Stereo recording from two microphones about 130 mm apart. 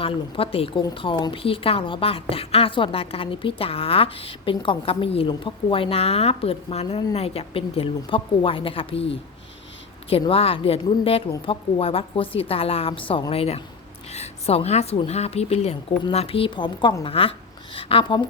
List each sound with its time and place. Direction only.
0.0 s a woman's voice: 45° left (ahead or behind)
10.1 s a woman's voice: 45° left (ahead or behind)